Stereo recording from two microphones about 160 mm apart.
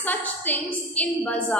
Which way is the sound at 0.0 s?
10° left (ahead or behind).